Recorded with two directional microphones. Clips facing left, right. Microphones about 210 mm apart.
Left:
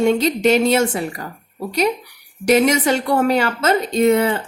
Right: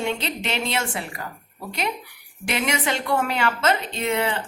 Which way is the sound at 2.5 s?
40° left (ahead or behind).